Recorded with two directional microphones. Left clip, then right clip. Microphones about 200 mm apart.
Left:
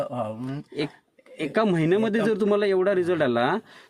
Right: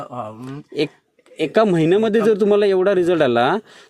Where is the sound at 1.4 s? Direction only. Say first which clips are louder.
Right 7 dB; 20° right (ahead or behind).